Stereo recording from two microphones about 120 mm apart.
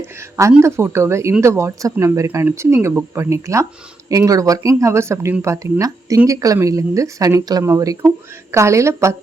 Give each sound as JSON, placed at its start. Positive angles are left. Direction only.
{"t": 0.0, "sound": "speech", "side_deg": -25}